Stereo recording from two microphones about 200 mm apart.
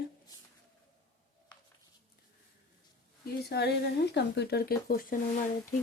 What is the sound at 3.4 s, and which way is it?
Speech, 55° left (ahead or behind).